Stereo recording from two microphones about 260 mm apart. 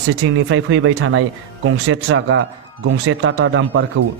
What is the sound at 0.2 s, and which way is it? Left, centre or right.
A man's voice, right.